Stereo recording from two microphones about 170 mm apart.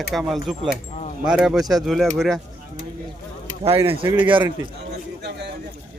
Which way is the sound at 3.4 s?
35° right (ahead or behind).